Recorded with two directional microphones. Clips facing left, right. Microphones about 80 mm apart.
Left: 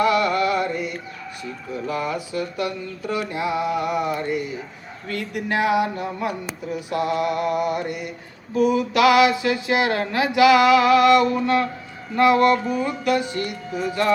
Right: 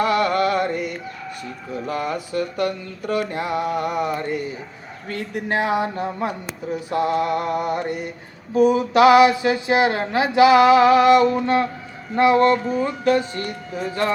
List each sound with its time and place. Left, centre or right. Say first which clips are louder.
0.0 s carnatic music: even; right
1.9 s music: right 1 dB; right
5.0 s speech: even; right
8.5 s a sound: right 3 dB; right
12.1 s speech: right 1 dB; right